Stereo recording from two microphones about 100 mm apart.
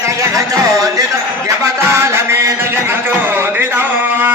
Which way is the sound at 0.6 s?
35° right (ahead or behind).